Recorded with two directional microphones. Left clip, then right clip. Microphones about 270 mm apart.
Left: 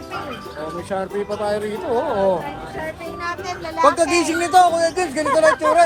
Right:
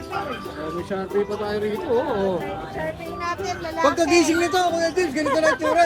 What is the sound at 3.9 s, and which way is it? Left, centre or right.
Speech, centre.